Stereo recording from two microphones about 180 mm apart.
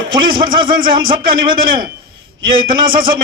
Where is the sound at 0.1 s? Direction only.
25° right (ahead or behind).